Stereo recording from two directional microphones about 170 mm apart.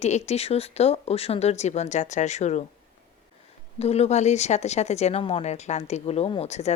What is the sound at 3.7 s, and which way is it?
Speech, 35° left (ahead or behind).